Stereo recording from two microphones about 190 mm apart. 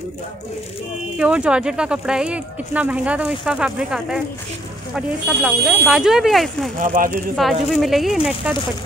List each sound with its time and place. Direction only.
1.1 s speech: 5° right (ahead or behind)
6.8 s speech: 45° right (ahead or behind)
7.4 s speech: centre (ahead or behind)